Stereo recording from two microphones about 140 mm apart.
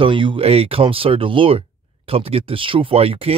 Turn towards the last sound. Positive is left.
turn(degrees=-45)  # may be behind; listen again after turning